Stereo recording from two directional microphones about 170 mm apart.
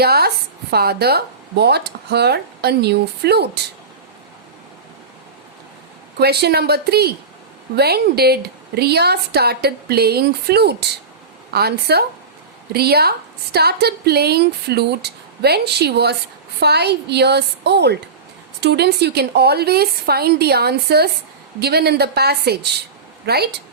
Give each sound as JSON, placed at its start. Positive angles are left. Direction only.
{"t": 0.0, "sound": "a woman's voice", "side_deg": -70}
{"t": 6.1, "sound": "a woman's voice", "side_deg": -70}